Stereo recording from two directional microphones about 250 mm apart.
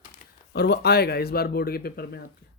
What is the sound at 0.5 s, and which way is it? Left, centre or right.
Speech, left.